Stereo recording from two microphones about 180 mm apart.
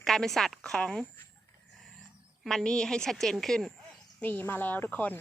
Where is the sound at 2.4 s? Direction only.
Centre (ahead or behind).